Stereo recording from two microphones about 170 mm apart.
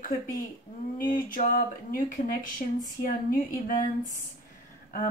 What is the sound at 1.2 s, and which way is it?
A woman's voice, 55° left (ahead or behind).